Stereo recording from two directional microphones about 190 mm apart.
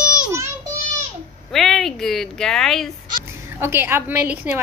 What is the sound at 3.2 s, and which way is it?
A woman's voice, 10° right (ahead or behind).